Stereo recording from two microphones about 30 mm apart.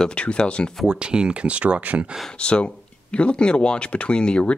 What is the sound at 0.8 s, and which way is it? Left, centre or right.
Speech, right.